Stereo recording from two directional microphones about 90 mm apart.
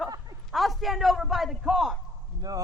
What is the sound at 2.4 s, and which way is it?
Speech, 45° right (ahead or behind).